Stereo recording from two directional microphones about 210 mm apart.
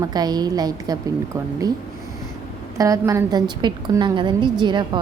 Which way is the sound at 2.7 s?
15° right (ahead or behind).